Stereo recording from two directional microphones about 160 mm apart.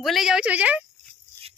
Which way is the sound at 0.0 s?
Centre (ahead or behind).